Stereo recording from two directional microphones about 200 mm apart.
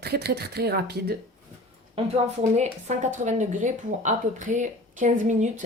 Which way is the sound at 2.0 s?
30° right (ahead or behind).